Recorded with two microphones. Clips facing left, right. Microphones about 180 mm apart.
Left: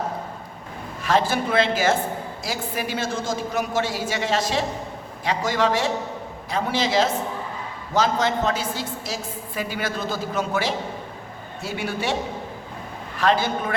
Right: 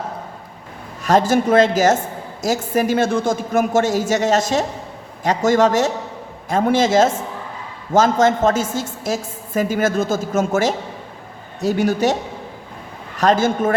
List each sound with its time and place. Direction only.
1.0 s a woman's voice: 45° right (ahead or behind)
13.1 s a woman's voice: 45° right (ahead or behind)